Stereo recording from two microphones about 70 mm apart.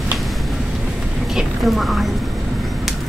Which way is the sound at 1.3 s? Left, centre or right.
Centre.